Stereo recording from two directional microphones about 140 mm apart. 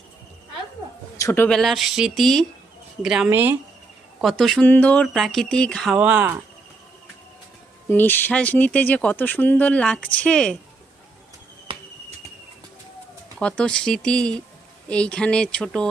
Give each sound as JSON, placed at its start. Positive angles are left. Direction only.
{"t": 1.2, "sound": "a man's voice", "side_deg": 15}
{"t": 1.5, "sound": "speech", "side_deg": 5}
{"t": 3.2, "sound": "speech", "side_deg": -15}
{"t": 4.2, "sound": "speech", "side_deg": 0}
{"t": 5.9, "sound": "speech", "side_deg": -10}
{"t": 7.9, "sound": "speech", "side_deg": 15}
{"t": 11.7, "sound": "a sound", "side_deg": -40}
{"t": 13.4, "sound": "speech", "side_deg": 5}